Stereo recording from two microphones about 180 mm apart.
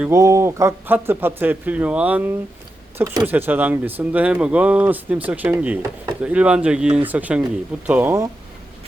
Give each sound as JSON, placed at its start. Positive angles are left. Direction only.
{"t": 0.0, "sound": "speech", "side_deg": -15}